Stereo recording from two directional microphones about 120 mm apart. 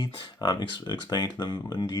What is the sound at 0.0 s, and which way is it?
Speech, 35° left (ahead or behind).